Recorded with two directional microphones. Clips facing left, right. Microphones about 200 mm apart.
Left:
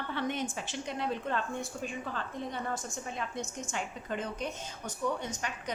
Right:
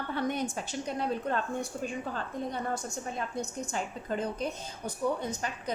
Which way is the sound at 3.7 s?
35° right (ahead or behind).